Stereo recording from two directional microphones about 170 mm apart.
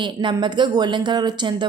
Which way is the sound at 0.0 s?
25° right (ahead or behind).